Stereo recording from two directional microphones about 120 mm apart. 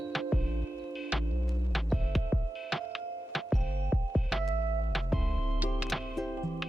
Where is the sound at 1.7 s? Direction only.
Centre (ahead or behind).